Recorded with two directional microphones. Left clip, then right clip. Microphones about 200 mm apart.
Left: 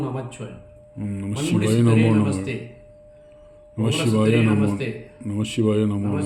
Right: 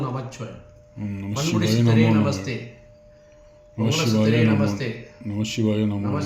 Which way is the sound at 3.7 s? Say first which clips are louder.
Even; 15° left (ahead or behind).